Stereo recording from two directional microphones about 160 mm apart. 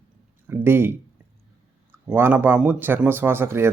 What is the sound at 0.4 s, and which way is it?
Speech, 15° right (ahead or behind).